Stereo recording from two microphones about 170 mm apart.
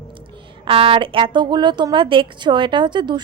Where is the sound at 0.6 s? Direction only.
30° right (ahead or behind).